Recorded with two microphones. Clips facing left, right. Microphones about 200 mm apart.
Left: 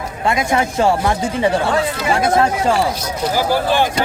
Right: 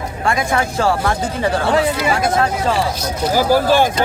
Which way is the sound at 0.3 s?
25° left (ahead or behind).